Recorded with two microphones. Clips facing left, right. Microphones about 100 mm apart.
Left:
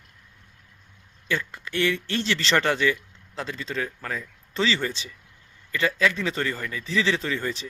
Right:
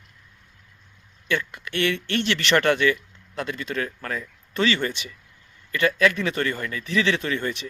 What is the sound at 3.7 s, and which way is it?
Speech, 55° right (ahead or behind).